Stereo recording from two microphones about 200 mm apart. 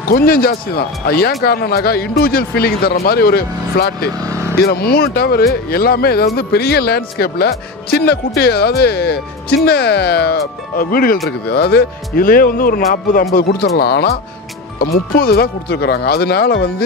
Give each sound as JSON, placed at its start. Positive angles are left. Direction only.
{"t": 0.1, "sound": "speech", "side_deg": 50}
{"t": 4.2, "sound": "vehicle", "side_deg": -15}
{"t": 4.6, "sound": "speech", "side_deg": 50}